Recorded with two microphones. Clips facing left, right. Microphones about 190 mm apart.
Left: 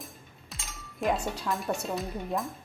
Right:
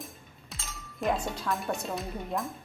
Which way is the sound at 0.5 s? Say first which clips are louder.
Even; centre (ahead or behind).